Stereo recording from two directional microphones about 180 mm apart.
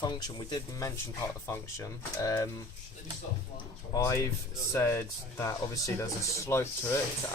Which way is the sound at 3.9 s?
20° left (ahead or behind).